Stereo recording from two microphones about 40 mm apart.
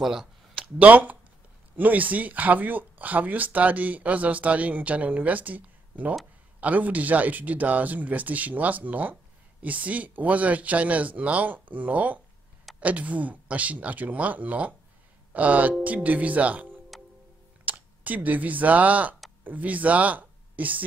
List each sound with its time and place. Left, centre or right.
0.0 s speech: centre
0.7 s speech: right
16.9 s music: centre
17.6 s speech: right